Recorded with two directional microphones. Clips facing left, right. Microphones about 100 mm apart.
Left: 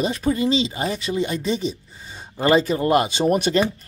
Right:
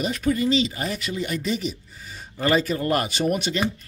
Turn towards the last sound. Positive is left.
turn(degrees=40)  # may be behind; listen again after turning